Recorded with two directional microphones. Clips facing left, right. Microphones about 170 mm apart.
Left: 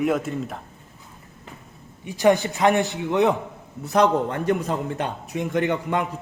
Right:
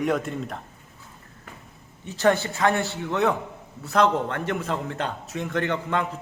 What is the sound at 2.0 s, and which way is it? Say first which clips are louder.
A man's voice: left 3 dB; 15° left (ahead or behind).